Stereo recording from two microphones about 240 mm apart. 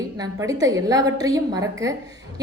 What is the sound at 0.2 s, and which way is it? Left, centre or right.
A woman's voice, centre.